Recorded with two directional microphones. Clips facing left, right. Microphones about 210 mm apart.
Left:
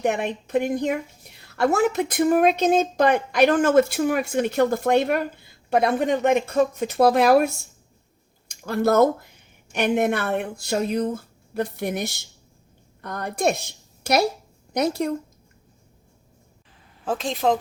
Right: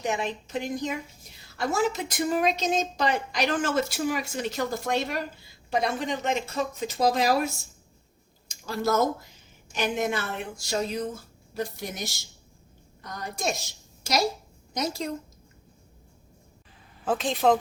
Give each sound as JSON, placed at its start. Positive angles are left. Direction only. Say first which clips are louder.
{"t": 0.0, "sound": "a woman's voice", "louder": "left 5 dB", "side_deg": 60}
{"t": 17.1, "sound": "speech", "louder": "even", "side_deg": 0}